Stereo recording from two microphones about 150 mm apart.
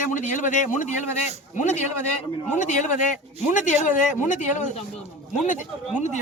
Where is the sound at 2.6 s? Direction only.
55° left (ahead or behind).